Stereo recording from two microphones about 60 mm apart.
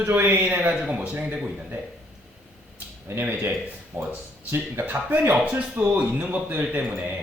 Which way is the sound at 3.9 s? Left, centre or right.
Right.